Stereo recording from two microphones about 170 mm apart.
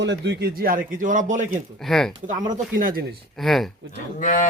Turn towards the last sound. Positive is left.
turn(degrees=50)  # may be behind; listen again after turning